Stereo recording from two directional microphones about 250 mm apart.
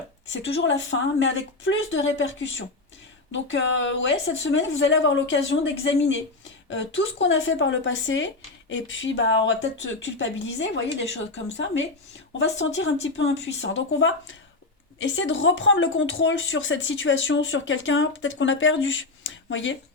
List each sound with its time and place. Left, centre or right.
0.9 s speech: left